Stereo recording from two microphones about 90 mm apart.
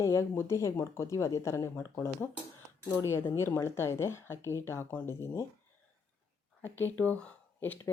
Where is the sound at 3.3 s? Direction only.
30° left (ahead or behind).